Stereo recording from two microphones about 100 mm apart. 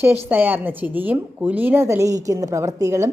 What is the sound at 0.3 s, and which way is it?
A woman's voice, 20° right (ahead or behind).